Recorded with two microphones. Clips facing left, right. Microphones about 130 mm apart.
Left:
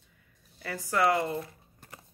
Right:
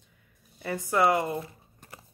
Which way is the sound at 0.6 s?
20° right (ahead or behind).